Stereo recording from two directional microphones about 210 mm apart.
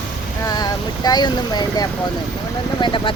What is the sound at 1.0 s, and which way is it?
Speech, 20° left (ahead or behind).